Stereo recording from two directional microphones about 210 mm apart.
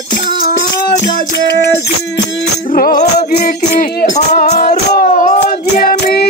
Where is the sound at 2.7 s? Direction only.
40° left (ahead or behind).